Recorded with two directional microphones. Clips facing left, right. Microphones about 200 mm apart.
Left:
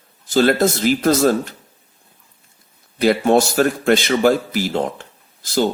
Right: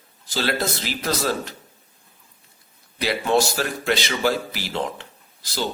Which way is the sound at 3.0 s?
50° left (ahead or behind).